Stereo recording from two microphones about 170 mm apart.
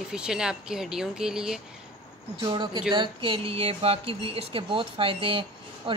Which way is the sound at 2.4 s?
30° right (ahead or behind).